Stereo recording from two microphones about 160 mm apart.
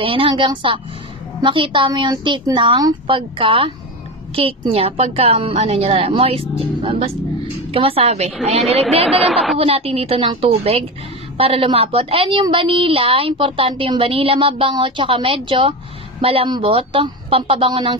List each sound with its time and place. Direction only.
0.0 s a woman's voice: 35° right (ahead or behind)
9.2 s a woman's voice: centre (ahead or behind)
9.6 s a woman's voice: 40° right (ahead or behind)